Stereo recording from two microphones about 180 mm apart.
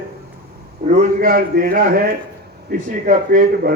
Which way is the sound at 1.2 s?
55° right (ahead or behind).